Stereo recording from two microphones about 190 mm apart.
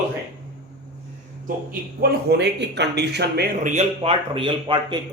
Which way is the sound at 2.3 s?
65° right (ahead or behind).